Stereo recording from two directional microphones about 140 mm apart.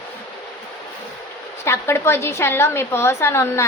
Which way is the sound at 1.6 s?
15° left (ahead or behind).